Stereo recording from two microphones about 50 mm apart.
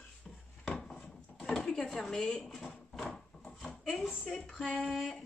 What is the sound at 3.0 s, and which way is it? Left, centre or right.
Wood, centre.